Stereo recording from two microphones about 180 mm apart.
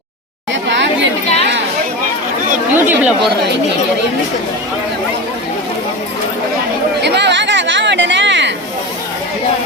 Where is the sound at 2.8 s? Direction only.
10° right (ahead or behind).